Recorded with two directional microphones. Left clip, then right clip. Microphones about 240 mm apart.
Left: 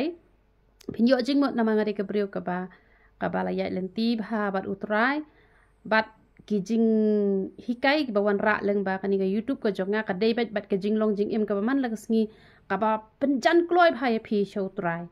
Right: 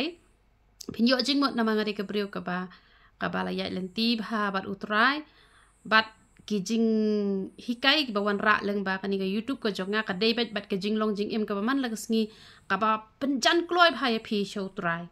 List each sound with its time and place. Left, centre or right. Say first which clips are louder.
0.8 s a woman's voice: left 2 dB; centre